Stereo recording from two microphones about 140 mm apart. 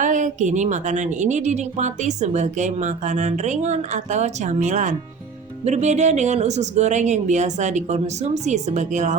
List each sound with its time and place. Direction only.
0.0 s a woman's voice: 65° right (ahead or behind)